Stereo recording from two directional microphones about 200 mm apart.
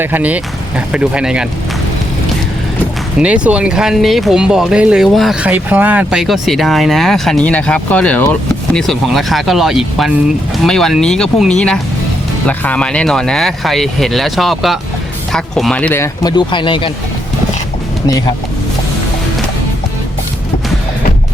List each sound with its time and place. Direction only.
0.0 s speech: 10° right (ahead or behind)
3.2 s speech: 5° right (ahead or behind)
16.2 s speech: 20° left (ahead or behind)